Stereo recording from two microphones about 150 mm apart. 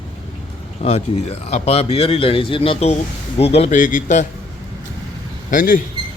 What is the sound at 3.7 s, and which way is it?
Speech, 60° left (ahead or behind).